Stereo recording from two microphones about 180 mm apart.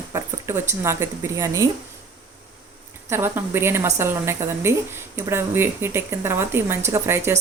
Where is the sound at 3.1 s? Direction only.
15° right (ahead or behind).